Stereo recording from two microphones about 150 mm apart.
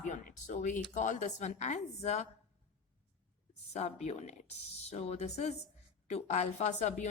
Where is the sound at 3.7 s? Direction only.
50° left (ahead or behind).